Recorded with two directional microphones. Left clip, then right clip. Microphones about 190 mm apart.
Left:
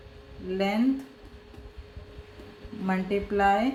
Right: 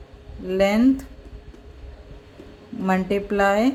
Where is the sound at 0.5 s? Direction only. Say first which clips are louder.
Right 9 dB; 60° right (ahead or behind).